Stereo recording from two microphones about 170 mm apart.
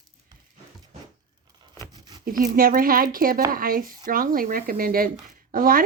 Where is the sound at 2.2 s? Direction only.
55° right (ahead or behind).